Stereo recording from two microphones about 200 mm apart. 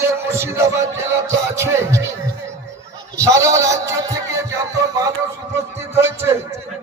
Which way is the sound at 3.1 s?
15° right (ahead or behind).